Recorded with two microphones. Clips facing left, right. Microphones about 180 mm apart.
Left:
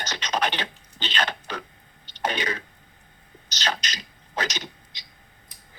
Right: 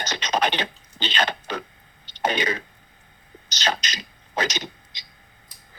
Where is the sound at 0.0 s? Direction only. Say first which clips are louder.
Right 3 dB; 20° right (ahead or behind).